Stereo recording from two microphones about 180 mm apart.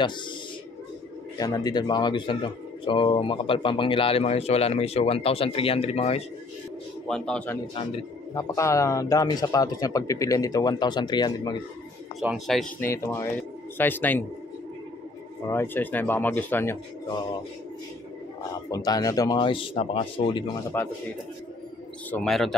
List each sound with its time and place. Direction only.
1.4 s speech: 20° left (ahead or behind)
7.1 s speech: 5° left (ahead or behind)
8.4 s speech: 20° left (ahead or behind)
12.2 s speech: centre (ahead or behind)
12.8 s speech: 15° left (ahead or behind)
15.4 s speech: 15° left (ahead or behind)
18.7 s speech: 20° left (ahead or behind)
20.7 s speech: 10° left (ahead or behind)
22.1 s speech: centre (ahead or behind)